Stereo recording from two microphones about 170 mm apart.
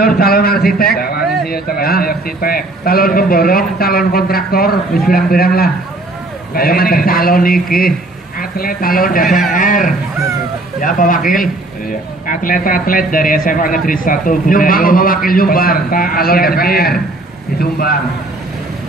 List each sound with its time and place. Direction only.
0.0 s a man's voice: 60° left (ahead or behind)